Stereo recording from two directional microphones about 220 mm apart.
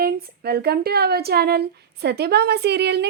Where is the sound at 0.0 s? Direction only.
45° right (ahead or behind).